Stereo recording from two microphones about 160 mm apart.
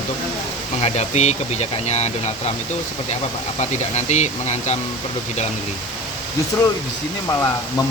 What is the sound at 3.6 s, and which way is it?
Speech, 45° left (ahead or behind).